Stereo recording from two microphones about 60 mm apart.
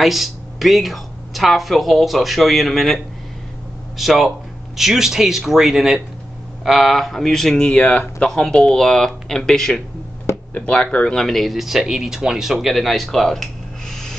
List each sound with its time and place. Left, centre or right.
0.0 s speech: centre
7.7 s speech: left
8.2 s speech: centre